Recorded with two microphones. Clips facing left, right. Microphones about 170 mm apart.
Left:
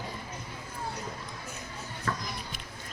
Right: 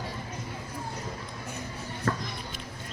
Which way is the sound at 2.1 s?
40° right (ahead or behind).